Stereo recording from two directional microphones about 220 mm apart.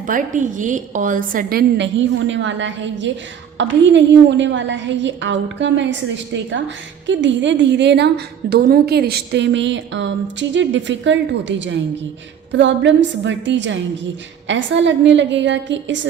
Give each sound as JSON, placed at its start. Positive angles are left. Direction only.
{"t": 0.0, "sound": "a woman's voice", "side_deg": -35}